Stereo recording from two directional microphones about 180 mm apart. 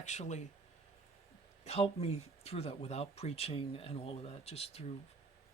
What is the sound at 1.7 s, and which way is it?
Speech, 35° left (ahead or behind).